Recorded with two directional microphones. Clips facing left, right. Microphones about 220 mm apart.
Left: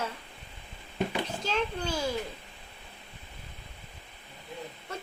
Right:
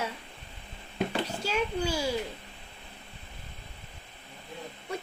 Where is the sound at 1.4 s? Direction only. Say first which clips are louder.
Right 3 dB; 10° right (ahead or behind).